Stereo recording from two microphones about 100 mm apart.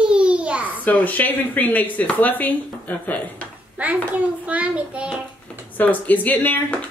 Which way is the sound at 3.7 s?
15° right (ahead or behind).